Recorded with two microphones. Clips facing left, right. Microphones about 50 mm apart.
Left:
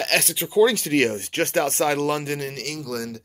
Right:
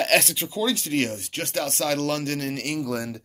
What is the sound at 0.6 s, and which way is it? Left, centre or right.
Speech, left.